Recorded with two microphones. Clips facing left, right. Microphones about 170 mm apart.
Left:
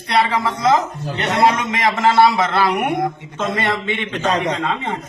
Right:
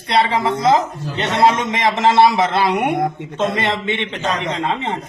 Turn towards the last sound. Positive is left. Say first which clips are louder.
# even
turn(degrees=-25)  # may be behind; listen again after turning